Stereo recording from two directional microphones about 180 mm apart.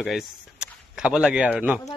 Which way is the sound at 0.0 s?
Centre (ahead or behind).